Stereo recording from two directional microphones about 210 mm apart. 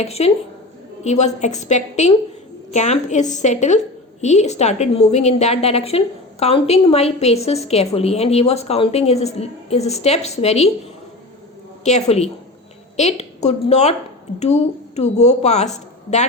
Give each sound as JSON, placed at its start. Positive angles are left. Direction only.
{"t": 0.0, "sound": "a woman's voice", "side_deg": 30}
{"t": 11.9, "sound": "a woman's voice", "side_deg": 30}